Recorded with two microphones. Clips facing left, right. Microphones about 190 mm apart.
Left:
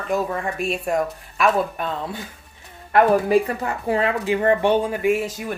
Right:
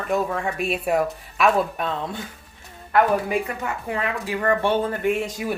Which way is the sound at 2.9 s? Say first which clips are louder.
Left 4 dB; 35° left (ahead or behind).